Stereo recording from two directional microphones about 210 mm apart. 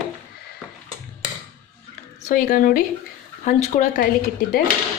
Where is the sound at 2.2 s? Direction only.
40° left (ahead or behind).